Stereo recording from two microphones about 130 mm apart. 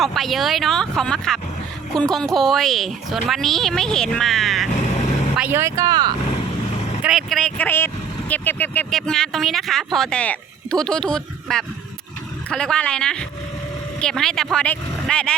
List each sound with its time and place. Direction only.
0.0 s speech: centre (ahead or behind)
5.4 s speech: 15° right (ahead or behind); by 6.1 s 35° right (ahead or behind)
7.0 s speech: centre (ahead or behind)